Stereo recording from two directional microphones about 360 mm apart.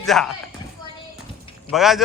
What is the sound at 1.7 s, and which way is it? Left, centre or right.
Speech, centre.